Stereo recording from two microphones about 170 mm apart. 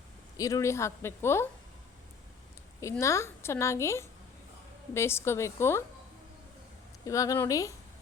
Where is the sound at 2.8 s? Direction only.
15° left (ahead or behind).